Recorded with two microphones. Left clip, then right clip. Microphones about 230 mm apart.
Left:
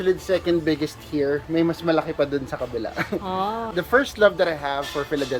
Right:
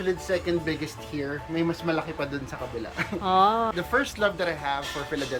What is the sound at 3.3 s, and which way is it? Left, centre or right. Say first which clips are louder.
Speech: right 9 dB; centre.